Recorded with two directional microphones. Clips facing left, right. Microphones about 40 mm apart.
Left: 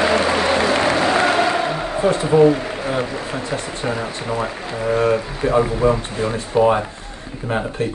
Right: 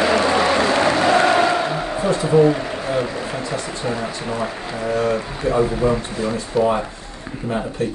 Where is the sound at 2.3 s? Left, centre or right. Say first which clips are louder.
Left 1 dB; centre.